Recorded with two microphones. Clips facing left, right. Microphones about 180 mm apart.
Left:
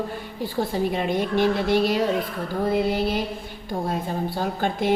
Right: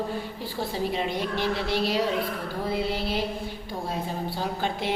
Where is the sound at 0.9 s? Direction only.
50° left (ahead or behind).